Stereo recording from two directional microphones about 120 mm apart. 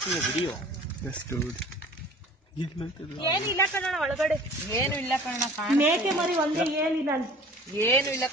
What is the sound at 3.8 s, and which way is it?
Speech, centre (ahead or behind).